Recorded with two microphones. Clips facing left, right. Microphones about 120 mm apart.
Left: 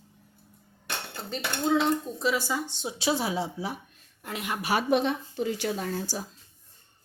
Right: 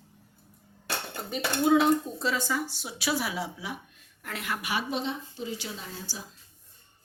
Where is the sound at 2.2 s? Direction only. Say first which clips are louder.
Left 2 dB; 10° left (ahead or behind).